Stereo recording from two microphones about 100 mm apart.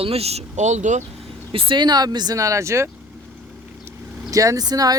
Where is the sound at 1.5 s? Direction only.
55° right (ahead or behind); by 2.9 s 30° right (ahead or behind).